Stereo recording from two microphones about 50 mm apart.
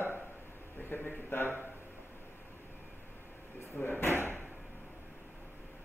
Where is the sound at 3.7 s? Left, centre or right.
Left.